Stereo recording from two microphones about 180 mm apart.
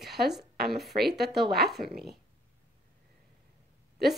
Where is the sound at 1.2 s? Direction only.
65° right (ahead or behind).